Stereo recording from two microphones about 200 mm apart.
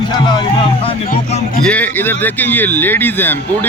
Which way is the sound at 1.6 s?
5° left (ahead or behind).